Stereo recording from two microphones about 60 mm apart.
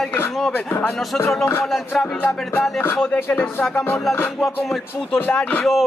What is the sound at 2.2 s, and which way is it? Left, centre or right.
Speech, left.